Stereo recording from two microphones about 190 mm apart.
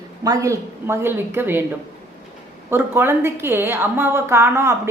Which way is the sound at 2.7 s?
10° right (ahead or behind).